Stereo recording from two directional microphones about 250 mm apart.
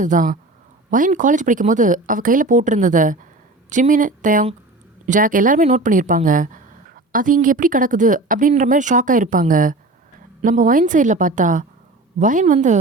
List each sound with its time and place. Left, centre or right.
0.0 s a woman's voice: right